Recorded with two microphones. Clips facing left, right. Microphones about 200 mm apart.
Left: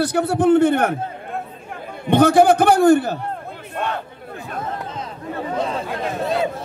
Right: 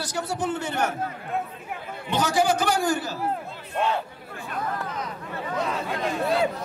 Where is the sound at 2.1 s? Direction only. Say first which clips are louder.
Left 10 dB; 60° left (ahead or behind).